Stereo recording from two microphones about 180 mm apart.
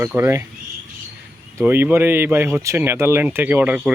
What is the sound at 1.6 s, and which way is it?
Speech, 10° right (ahead or behind).